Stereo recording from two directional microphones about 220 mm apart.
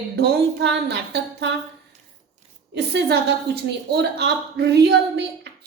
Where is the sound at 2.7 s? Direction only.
50° right (ahead or behind).